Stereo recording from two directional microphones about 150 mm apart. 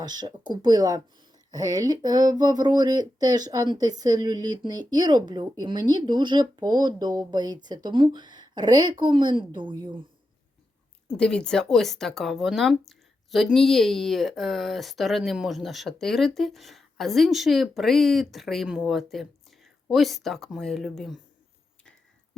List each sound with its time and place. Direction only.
0.0 s speech: 30° right (ahead or behind)
11.2 s speech: 5° left (ahead or behind)